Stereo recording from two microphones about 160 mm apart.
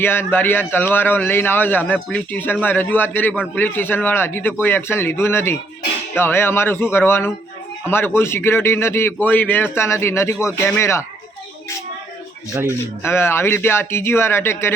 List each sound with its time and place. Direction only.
0.0 s a man's voice: 15° left (ahead or behind)
12.6 s a man's voice: 15° left (ahead or behind)